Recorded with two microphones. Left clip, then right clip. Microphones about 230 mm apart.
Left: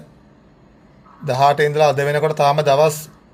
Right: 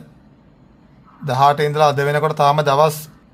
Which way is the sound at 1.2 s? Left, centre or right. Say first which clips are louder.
Even; centre.